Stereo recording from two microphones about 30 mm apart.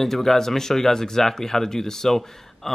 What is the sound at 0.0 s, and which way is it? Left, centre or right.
Speech, centre.